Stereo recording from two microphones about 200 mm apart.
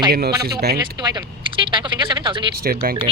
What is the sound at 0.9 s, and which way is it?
Speech, 20° right (ahead or behind).